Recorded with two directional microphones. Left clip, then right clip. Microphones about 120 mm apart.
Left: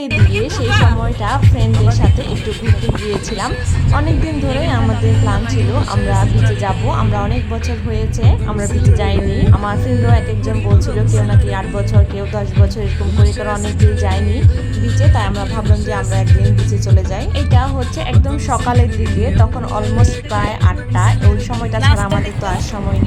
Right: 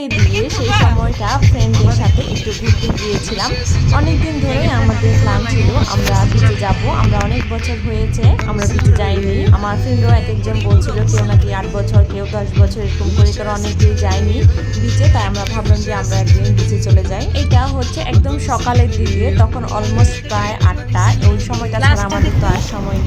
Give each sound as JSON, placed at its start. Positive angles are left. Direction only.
{"t": 0.3, "sound": "speech", "side_deg": 0}
{"t": 4.5, "sound": "speech", "side_deg": 0}
{"t": 9.0, "sound": "speech", "side_deg": 0}
{"t": 18.1, "sound": "speech", "side_deg": 0}